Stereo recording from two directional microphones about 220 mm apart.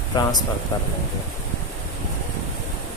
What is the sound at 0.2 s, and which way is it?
Speech, 20° left (ahead or behind).